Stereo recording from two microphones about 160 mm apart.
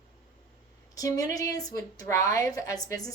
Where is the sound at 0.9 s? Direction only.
20° left (ahead or behind).